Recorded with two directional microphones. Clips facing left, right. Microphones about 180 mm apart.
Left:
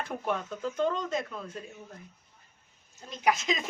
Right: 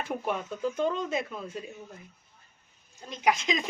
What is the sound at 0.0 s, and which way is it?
Speech, 10° right (ahead or behind).